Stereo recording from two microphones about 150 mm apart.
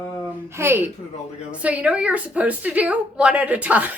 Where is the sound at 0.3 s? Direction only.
15° right (ahead or behind).